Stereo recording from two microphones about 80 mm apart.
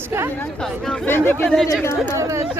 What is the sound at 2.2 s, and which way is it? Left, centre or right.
Speech, right.